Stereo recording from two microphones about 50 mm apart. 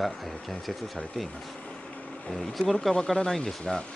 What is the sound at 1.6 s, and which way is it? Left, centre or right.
Vehicle, left.